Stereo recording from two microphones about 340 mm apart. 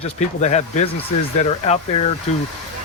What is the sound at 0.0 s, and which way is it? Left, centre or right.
Speech, centre.